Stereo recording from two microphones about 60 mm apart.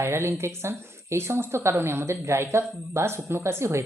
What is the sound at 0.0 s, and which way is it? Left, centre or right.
A woman's voice, right.